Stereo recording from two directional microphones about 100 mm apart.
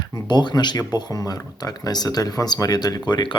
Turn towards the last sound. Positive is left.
turn(degrees=50)  # may be behind; listen again after turning